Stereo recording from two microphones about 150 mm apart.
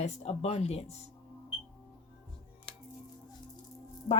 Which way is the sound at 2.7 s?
5° left (ahead or behind).